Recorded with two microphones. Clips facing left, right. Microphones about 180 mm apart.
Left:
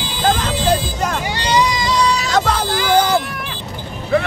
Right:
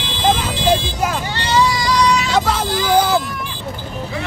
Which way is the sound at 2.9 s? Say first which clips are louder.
Even; centre (ahead or behind).